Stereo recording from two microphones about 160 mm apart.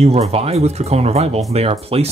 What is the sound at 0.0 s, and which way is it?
Speech, 40° right (ahead or behind).